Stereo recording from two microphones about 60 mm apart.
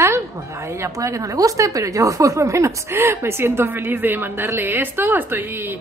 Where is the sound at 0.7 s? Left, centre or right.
Right.